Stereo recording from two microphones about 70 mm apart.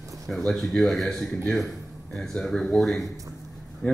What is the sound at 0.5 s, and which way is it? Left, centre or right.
A man's voice, centre.